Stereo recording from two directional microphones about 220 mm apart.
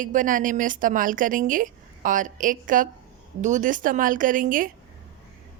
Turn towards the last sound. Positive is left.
turn(degrees=-40)  # may be behind; listen again after turning